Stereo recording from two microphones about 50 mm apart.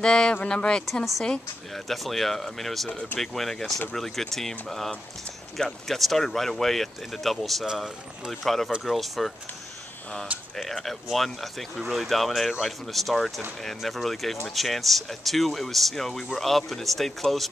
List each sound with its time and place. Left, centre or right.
0.0 s speech: centre
1.9 s speech: centre
7.6 s speech: centre
8.3 s speech: centre
10.6 s speech: centre